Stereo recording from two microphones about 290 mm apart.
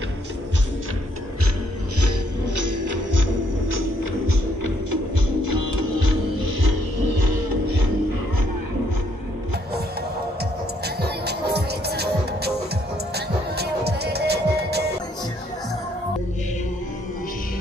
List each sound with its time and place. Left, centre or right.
2.7 s music: right
11.0 s music: right